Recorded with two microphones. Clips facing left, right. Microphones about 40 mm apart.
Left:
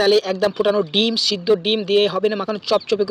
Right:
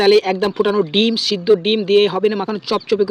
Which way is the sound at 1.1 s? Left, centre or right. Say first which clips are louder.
Right 3 dB; centre.